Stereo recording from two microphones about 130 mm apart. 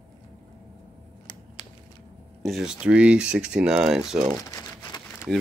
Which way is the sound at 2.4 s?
5° right (ahead or behind).